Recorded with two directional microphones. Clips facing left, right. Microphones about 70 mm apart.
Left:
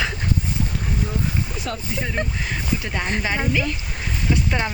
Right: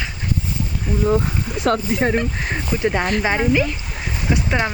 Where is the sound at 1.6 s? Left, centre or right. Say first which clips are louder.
Right 9 dB; right.